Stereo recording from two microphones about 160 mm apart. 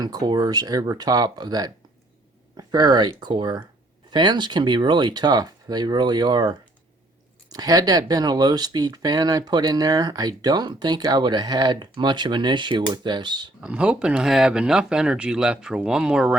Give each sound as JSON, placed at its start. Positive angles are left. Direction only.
{"t": 0.0, "sound": "speech", "side_deg": -25}
{"t": 13.6, "sound": "speech", "side_deg": -5}